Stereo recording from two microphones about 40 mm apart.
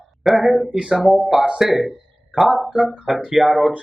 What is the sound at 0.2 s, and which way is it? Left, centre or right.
A woman's voice, centre.